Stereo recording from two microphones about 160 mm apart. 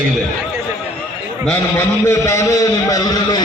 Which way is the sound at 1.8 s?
15° left (ahead or behind).